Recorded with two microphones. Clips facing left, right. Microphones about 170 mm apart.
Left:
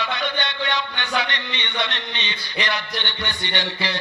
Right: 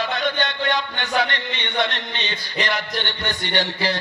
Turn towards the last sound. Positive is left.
turn(degrees=-45)  # may be behind; listen again after turning